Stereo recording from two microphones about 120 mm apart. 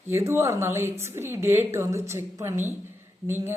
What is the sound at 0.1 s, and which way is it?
A woman's voice, 20° right (ahead or behind).